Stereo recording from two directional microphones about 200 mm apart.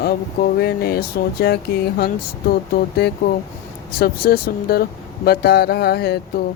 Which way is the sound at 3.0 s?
55° left (ahead or behind).